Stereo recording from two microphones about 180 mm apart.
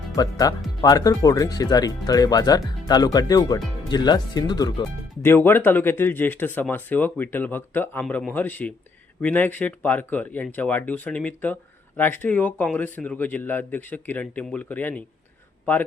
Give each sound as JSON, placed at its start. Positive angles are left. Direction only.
{"t": 0.2, "sound": "speech", "side_deg": 20}